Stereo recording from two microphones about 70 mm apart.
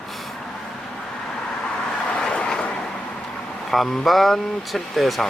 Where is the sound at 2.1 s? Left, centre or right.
Centre.